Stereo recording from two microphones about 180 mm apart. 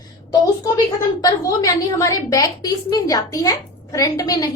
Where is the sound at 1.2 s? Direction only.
20° left (ahead or behind).